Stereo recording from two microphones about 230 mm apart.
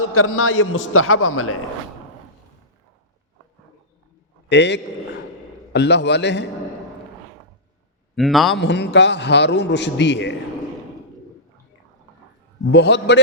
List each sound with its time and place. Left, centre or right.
0.0 s a man's voice: left
4.4 s a man's voice: left
8.1 s a man's voice: centre
8.5 s a man's voice: left
12.7 s a man's voice: left